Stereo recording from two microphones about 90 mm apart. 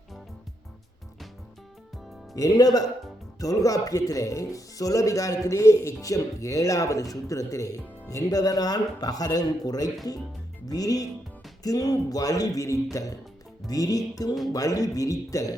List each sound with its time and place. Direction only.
2.3 s music: 40° left (ahead or behind)
3.4 s speech: 40° left (ahead or behind)
13.7 s music: 40° left (ahead or behind)
14.5 s speech: 40° left (ahead or behind)